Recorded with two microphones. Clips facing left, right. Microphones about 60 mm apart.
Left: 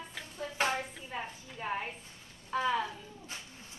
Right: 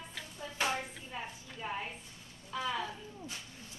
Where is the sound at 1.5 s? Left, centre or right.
Left.